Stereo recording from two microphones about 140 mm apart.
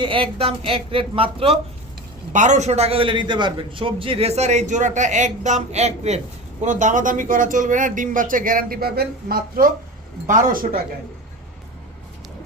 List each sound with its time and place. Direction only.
0.0 s speech: 40° right (ahead or behind)
2.3 s a man's voice: 60° right (ahead or behind); by 8.9 s 90° right
10.2 s speech: 85° right